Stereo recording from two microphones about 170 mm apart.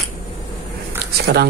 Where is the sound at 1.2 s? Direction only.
70° right (ahead or behind).